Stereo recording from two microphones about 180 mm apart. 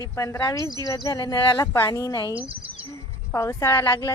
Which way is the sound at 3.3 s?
15° left (ahead or behind).